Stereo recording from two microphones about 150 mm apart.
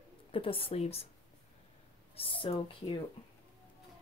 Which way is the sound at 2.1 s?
35° left (ahead or behind).